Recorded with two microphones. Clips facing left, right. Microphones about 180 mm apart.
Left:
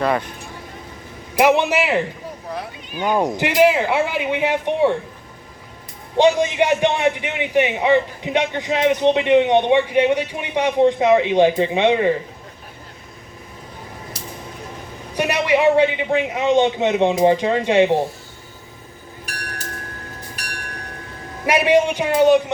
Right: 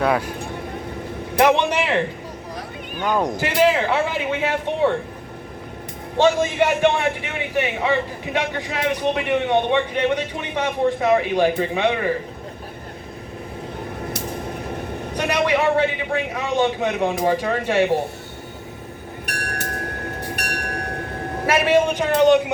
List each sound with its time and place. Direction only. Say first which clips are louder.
0.0 s speech: even; 5° right (ahead or behind)
1.4 s speech: left 1 dB; 5° left (ahead or behind)
3.0 s speech: left 2 dB; 10° left (ahead or behind)
6.1 s a man's voice: left 2 dB; 15° left (ahead or behind)
15.1 s a man's voice: left 2 dB; 10° left (ahead or behind)
20.1 s train: right 7 dB; 65° right (ahead or behind)
21.4 s speech: left 2 dB; 15° left (ahead or behind)